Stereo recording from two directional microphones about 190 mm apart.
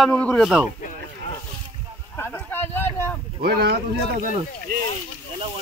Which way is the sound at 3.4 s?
55° right (ahead or behind).